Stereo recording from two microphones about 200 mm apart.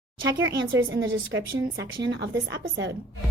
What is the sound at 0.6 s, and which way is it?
A woman's voice, 65° right (ahead or behind).